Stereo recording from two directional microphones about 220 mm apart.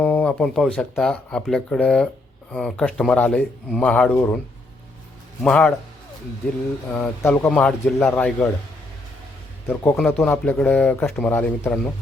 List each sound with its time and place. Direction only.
0.0 s speech: 5° left (ahead or behind)
5.4 s speech: 5° left (ahead or behind)
6.9 s speech: 10° left (ahead or behind)
9.6 s speech: 5° left (ahead or behind)